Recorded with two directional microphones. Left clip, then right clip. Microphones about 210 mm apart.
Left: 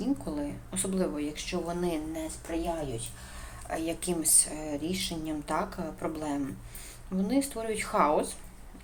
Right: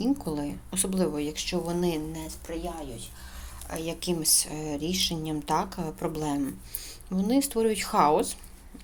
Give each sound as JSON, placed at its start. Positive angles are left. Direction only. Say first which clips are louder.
{"t": 0.0, "sound": "speech", "louder": "right 3 dB", "side_deg": -50}
{"t": 3.7, "sound": "speech", "louder": "right 1 dB", "side_deg": -50}